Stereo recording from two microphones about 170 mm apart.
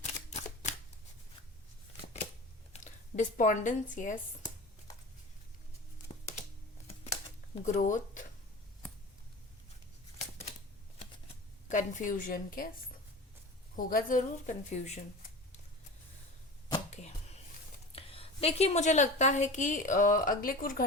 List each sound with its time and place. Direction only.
0.0 s a sound: 45° left (ahead or behind)
2.7 s speech: 45° left (ahead or behind)
7.6 s a woman's voice: 50° left (ahead or behind)
11.7 s a woman's voice: 50° left (ahead or behind)
13.7 s a woman's voice: 55° left (ahead or behind)
17.9 s a woman's voice: 35° left (ahead or behind); by 20.8 s 55° left (ahead or behind)